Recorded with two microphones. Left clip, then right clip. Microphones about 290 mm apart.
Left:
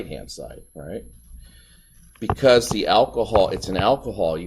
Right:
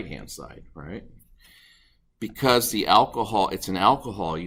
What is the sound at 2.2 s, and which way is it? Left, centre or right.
Speech, centre.